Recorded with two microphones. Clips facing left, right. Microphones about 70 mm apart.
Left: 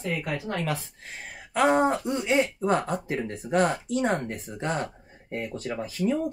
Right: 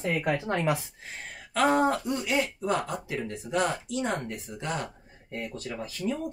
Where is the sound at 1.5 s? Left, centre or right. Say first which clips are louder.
Left 2 dB; left.